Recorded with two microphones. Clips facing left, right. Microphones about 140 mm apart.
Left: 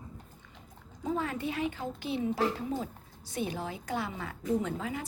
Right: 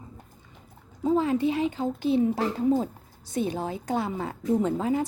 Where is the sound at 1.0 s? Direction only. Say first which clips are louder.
Right 10 dB; 25° right (ahead or behind).